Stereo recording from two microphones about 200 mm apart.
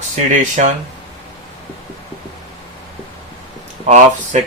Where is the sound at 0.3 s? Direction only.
40° right (ahead or behind).